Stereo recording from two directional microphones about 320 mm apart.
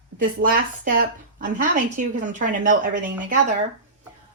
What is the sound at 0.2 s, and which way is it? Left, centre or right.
Speech, right.